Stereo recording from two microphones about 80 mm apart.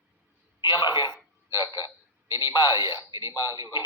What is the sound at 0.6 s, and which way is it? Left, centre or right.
Speech, left.